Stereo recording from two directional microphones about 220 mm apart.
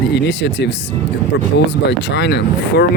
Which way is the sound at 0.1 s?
50° left (ahead or behind).